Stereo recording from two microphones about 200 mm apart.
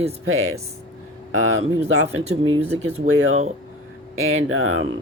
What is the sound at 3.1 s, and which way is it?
Speech, 90° right.